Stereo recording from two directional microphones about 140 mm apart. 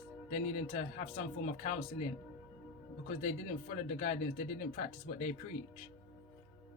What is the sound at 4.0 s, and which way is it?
Speech, 55° left (ahead or behind).